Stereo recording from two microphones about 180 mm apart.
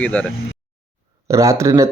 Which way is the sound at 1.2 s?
15° right (ahead or behind).